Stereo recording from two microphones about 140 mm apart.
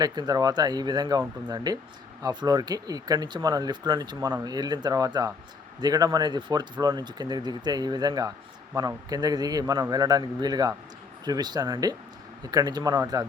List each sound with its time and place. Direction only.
0.0 s speech: 30° right (ahead or behind)